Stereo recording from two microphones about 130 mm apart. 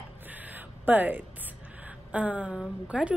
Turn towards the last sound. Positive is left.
turn(degrees=-10)  # may be behind; listen again after turning